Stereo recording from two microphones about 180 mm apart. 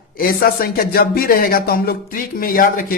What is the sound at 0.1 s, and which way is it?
Speech, 55° left (ahead or behind).